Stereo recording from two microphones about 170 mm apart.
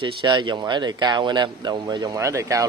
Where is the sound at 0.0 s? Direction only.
25° right (ahead or behind).